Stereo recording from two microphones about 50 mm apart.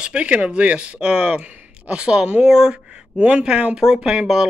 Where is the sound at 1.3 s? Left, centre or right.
Right.